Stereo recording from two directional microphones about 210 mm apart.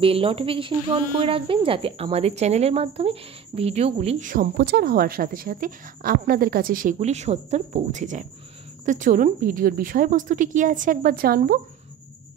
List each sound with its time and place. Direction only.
0.0 s speech: 25° right (ahead or behind); by 11.6 s 45° right (ahead or behind)